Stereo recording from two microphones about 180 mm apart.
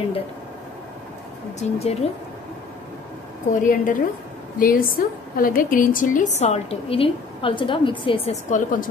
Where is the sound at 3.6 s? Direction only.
50° left (ahead or behind); by 8.3 s 30° left (ahead or behind).